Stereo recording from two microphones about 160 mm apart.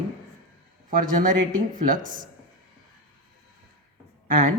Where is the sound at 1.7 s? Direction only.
55° right (ahead or behind).